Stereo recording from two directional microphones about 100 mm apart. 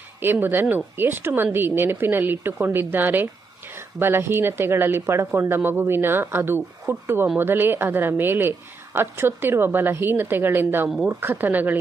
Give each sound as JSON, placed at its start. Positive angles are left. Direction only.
{"t": 0.2, "sound": "speech", "side_deg": -20}